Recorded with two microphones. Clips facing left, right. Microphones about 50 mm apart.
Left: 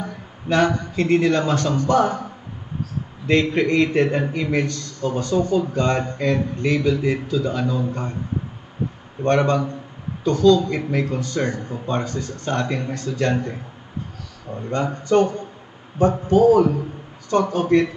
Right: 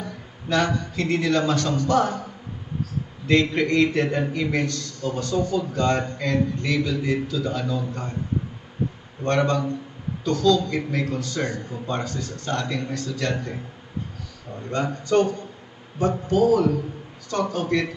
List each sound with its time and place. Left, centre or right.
0.0 s a sound: left
1.0 s a man's voice: left
3.3 s a man's voice: left
9.2 s a man's voice: left
11.8 s a man's voice: left
12.1 s a man's voice: left
14.7 s a man's voice: left